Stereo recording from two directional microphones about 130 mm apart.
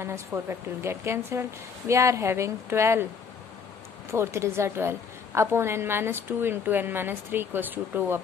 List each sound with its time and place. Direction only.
0.0 s a woman's voice: 20° right (ahead or behind)
4.1 s a woman's voice: 20° right (ahead or behind)